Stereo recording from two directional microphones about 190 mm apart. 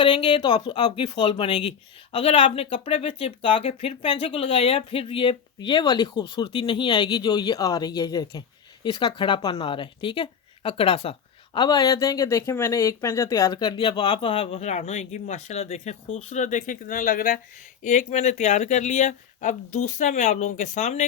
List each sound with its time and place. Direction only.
0.0 s speech: 25° left (ahead or behind)